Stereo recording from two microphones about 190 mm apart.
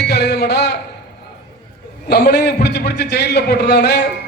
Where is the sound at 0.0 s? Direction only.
60° left (ahead or behind).